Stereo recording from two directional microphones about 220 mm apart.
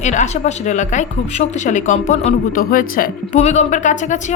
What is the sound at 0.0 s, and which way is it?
A woman's voice, 35° left (ahead or behind).